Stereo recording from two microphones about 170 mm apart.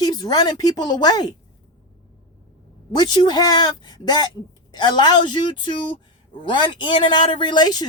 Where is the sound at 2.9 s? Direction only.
25° left (ahead or behind).